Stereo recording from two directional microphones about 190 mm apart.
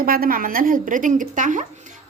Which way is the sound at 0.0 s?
50° right (ahead or behind).